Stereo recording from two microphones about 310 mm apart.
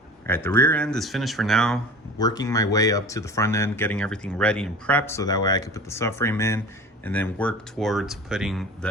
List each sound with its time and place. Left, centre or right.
0.3 s speech: centre
2.1 s speech: centre